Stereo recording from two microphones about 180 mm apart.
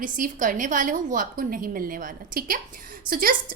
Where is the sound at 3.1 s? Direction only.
55° right (ahead or behind).